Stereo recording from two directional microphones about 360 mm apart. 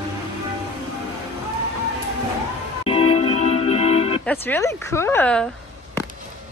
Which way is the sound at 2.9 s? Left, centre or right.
Centre.